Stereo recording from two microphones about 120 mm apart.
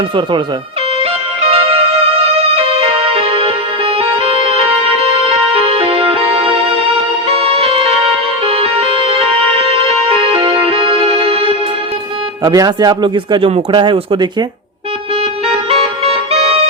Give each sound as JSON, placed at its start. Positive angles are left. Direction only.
{"t": 1.4, "sound": "music", "side_deg": -50}
{"t": 12.4, "sound": "speech", "side_deg": -30}
{"t": 16.3, "sound": "music", "side_deg": -55}